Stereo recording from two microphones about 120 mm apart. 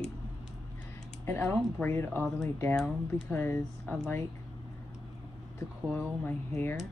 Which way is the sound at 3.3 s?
20° left (ahead or behind).